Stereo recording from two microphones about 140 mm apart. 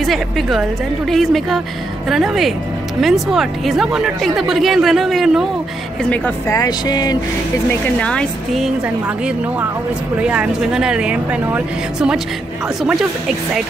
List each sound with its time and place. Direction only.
0.0 s a woman's voice: centre (ahead or behind)
6.0 s a woman's voice: 10° left (ahead or behind)
6.4 s speech: 25° left (ahead or behind)
8.0 s a woman's voice: 5° left (ahead or behind)